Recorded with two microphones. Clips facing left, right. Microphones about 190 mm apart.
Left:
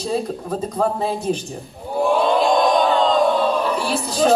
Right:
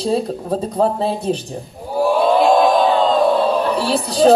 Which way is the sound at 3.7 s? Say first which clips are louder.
Right 4 dB; 35° right (ahead or behind).